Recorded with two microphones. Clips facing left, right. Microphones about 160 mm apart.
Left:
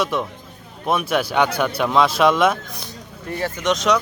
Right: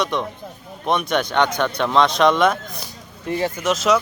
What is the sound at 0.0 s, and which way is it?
Speech, 5° left (ahead or behind).